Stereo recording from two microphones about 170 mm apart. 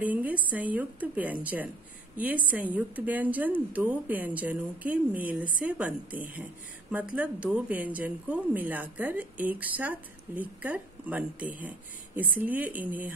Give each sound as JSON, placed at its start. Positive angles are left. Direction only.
{"t": 0.0, "sound": "a woman's voice", "side_deg": -10}